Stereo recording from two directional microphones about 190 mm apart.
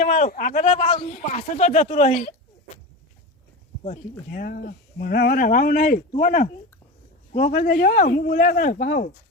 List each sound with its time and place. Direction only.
0.0 s speech: 40° left (ahead or behind)
3.8 s speech: 45° left (ahead or behind)